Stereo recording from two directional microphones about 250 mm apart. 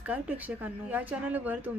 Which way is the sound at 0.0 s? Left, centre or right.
Centre.